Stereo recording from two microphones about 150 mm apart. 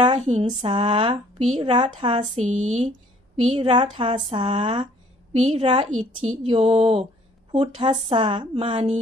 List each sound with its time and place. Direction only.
0.1 s speech: 45° right (ahead or behind)
0.6 s a woman's voice: 40° right (ahead or behind)
2.3 s speech: 50° right (ahead or behind)
3.3 s a woman's voice: 35° right (ahead or behind)